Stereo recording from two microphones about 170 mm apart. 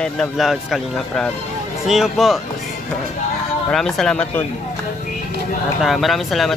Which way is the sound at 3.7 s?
5° left (ahead or behind).